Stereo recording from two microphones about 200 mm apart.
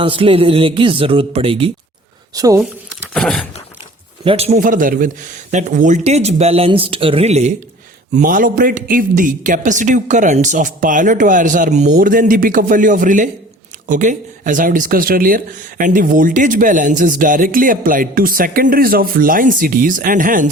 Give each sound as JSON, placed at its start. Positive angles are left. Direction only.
{"t": 0.0, "sound": "speech", "side_deg": -25}
{"t": 2.6, "sound": "speech", "side_deg": 0}
{"t": 4.2, "sound": "a man's voice", "side_deg": -30}